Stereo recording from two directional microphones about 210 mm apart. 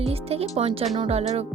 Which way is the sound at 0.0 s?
30° right (ahead or behind).